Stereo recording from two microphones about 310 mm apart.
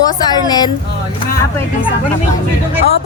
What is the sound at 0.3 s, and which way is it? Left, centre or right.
Speech, centre.